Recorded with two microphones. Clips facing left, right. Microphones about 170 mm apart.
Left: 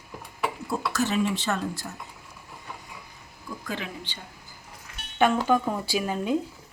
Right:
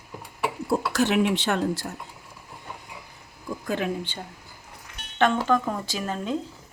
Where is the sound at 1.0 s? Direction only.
65° right (ahead or behind).